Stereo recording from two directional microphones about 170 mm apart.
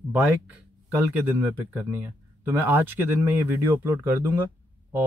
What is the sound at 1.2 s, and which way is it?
Speech, 10° right (ahead or behind).